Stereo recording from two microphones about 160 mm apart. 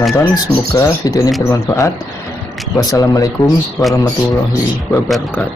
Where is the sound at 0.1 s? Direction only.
20° left (ahead or behind).